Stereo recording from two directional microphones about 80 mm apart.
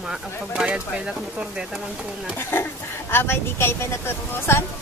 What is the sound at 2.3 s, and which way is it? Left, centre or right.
Speech, left.